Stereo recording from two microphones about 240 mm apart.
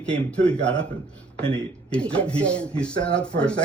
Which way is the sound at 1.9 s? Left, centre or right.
Centre.